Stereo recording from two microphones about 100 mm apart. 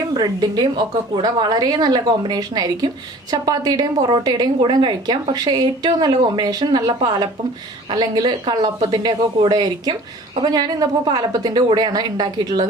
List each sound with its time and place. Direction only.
0.1 s a woman's voice: 40° right (ahead or behind)